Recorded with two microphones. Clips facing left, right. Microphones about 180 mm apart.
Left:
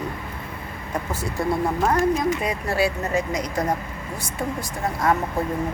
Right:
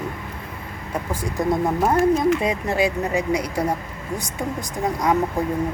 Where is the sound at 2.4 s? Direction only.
20° right (ahead or behind).